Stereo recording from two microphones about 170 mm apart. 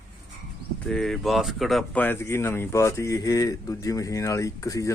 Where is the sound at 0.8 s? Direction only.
5° left (ahead or behind).